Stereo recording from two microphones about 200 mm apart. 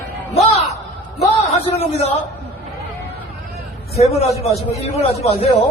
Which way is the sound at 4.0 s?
30° left (ahead or behind).